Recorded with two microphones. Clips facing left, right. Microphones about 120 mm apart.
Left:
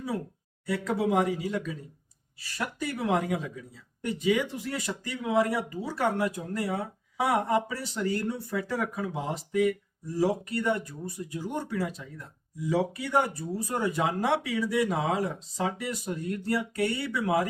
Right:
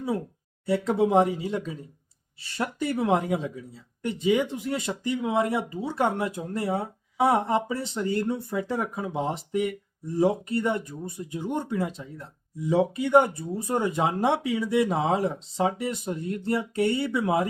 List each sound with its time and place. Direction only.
0.6 s speech: 25° right (ahead or behind)